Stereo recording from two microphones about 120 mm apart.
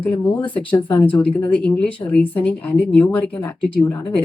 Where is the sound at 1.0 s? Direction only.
10° left (ahead or behind).